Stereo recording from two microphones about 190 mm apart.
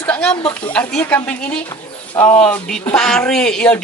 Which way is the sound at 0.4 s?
25° left (ahead or behind).